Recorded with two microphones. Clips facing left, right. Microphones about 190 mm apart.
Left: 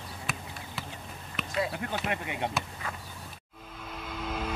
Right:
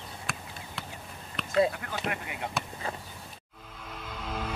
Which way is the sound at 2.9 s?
30° right (ahead or behind).